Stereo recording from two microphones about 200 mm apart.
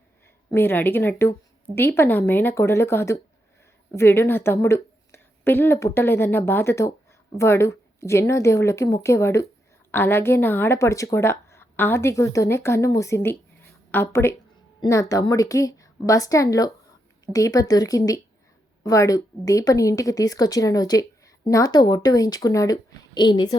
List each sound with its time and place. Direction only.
0.5 s speech: 10° left (ahead or behind)